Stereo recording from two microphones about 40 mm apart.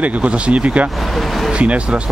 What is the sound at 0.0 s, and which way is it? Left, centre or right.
Speech, right.